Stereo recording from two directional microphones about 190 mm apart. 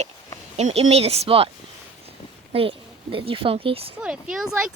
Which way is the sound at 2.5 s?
30° right (ahead or behind).